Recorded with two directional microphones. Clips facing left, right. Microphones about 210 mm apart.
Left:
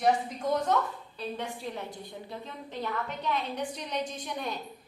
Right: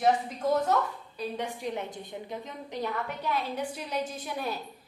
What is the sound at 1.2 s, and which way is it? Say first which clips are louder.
A woman's voice: right 2 dB; 15° right (ahead or behind).